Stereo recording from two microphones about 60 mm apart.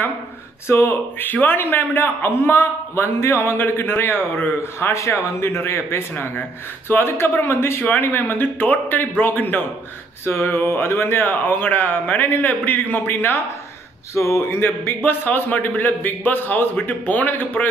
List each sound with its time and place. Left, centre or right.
0.7 s a man's voice: left
7.8 s a man's voice: left
14.1 s a man's voice: left